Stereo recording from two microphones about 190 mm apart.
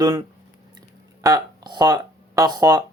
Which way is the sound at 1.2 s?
20° right (ahead or behind).